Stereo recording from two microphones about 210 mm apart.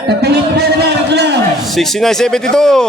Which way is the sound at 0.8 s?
50° right (ahead or behind).